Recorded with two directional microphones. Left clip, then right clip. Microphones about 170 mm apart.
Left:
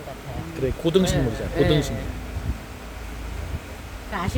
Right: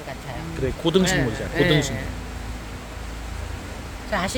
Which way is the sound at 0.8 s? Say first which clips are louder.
Right 1 dB; centre (ahead or behind).